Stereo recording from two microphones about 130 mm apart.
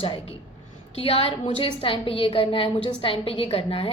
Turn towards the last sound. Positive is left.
turn(degrees=45)  # may be behind; listen again after turning